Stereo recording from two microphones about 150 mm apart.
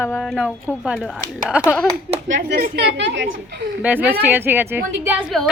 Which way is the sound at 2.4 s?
85° right.